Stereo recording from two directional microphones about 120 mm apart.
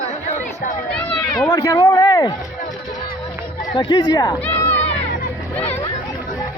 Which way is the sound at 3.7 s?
35° left (ahead or behind).